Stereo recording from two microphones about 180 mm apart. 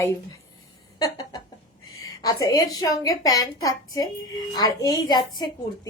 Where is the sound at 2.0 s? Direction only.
20° left (ahead or behind).